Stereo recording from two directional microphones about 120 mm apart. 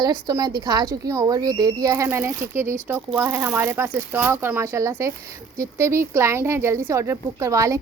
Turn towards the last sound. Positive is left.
turn(degrees=-25)  # may be behind; listen again after turning